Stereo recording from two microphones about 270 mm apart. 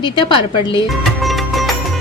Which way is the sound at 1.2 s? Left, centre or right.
Centre.